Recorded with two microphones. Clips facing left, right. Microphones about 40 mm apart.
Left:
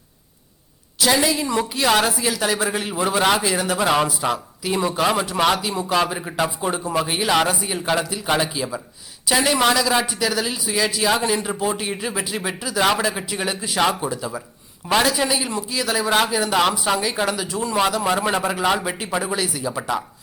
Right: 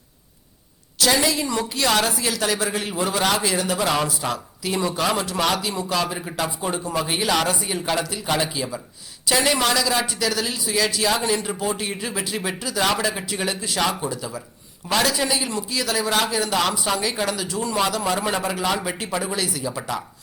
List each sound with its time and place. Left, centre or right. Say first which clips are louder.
0.9 s a woman's voice: left 1 dB; centre
7.0 s a woman's voice: left 2 dB; centre